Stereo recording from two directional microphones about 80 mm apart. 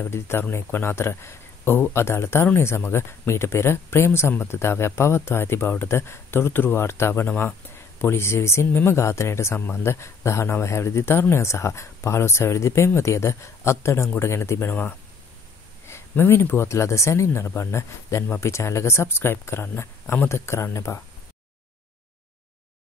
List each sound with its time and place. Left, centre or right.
0.0 s speech: left